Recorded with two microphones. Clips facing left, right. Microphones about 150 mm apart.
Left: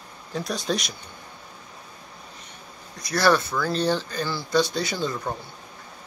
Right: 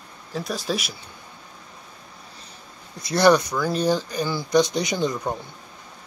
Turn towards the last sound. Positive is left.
turn(degrees=-20)  # may be behind; listen again after turning